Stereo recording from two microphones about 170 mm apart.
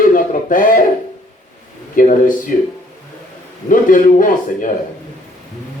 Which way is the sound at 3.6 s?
55° left (ahead or behind).